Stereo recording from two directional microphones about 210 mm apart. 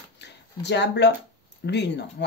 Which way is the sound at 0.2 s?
55° left (ahead or behind).